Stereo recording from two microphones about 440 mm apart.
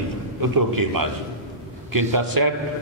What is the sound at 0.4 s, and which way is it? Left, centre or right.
A man's voice, right.